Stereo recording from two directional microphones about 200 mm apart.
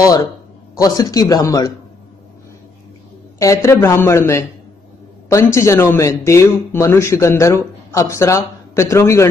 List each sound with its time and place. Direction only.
0.7 s speech: 15° left (ahead or behind)
3.3 s speech: 15° left (ahead or behind)